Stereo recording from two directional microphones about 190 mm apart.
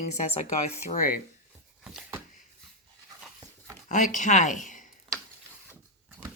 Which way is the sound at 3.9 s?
40° left (ahead or behind).